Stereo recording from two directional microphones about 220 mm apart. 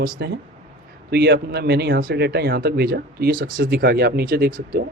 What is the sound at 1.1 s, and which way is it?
Speech, 50° right (ahead or behind).